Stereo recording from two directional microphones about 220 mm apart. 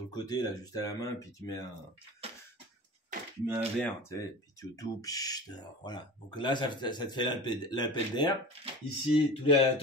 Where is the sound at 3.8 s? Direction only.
15° left (ahead or behind).